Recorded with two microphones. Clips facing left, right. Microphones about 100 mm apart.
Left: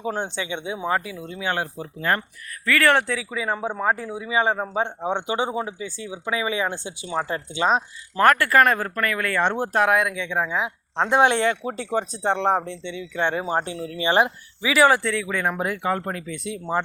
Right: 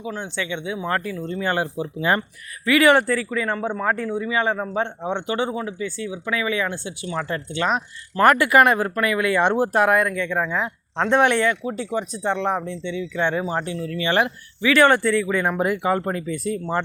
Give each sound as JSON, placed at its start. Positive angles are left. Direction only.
{"t": 0.2, "sound": "speech", "side_deg": 20}
{"t": 0.9, "sound": "speech", "side_deg": 10}
{"t": 1.5, "sound": "speech", "side_deg": -5}
{"t": 3.2, "sound": "speech", "side_deg": 10}
{"t": 8.2, "sound": "speech", "side_deg": -10}
{"t": 12.6, "sound": "speech", "side_deg": -45}
{"t": 13.1, "sound": "speech", "side_deg": 50}
{"t": 13.7, "sound": "speech", "side_deg": 25}
{"t": 14.7, "sound": "speech", "side_deg": 5}